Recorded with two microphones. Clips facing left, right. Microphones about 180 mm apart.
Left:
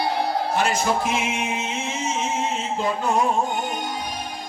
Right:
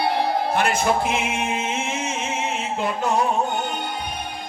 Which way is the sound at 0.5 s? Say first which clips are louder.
Left 1 dB; 55° right (ahead or behind).